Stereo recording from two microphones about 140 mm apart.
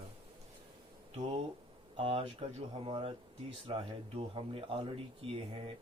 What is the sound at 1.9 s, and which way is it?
Speech, 45° right (ahead or behind).